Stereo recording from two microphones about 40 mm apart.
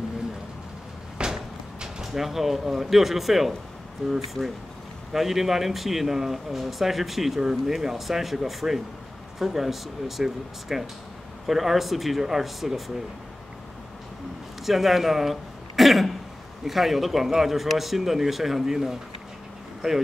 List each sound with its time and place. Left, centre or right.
1.2 s a sound: right
2.1 s speech: centre
14.7 s speech: centre